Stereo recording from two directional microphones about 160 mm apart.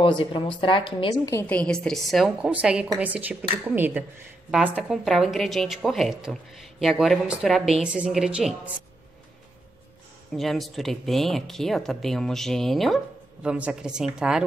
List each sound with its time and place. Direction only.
0.0 s speech: 35° left (ahead or behind)
1.5 s a woman's voice: 5° left (ahead or behind); by 4.0 s 10° right (ahead or behind)
4.8 s speech: centre (ahead or behind)
10.3 s speech: centre (ahead or behind)